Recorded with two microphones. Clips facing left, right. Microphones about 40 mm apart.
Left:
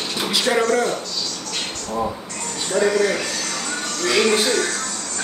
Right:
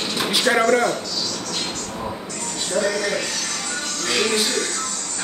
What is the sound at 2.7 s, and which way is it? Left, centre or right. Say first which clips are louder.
Speech: left 4 dB; centre.